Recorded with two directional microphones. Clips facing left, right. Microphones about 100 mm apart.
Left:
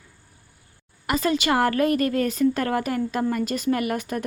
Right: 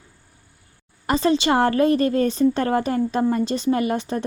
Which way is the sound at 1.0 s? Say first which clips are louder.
Right 4 dB; 30° right (ahead or behind).